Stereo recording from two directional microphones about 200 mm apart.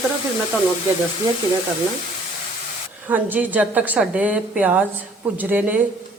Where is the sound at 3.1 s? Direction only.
10° right (ahead or behind).